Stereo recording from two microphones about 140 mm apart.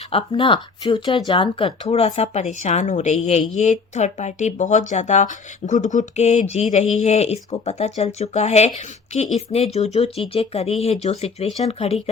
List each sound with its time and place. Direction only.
0.1 s speech: 40° left (ahead or behind)